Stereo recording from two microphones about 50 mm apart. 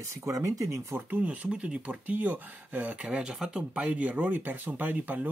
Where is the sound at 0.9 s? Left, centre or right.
Right.